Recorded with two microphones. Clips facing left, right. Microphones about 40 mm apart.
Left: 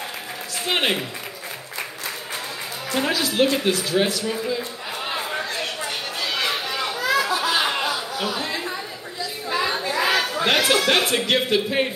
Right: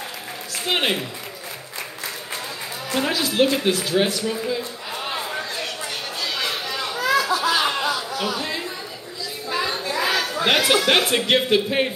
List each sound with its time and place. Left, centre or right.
0.7 s speech: centre
2.9 s speech: centre
5.1 s a sound: centre
8.3 s chatter: centre
9.5 s a sound: centre
10.4 s speech: centre